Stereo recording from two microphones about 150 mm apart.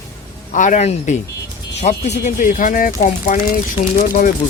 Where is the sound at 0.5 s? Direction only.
55° left (ahead or behind).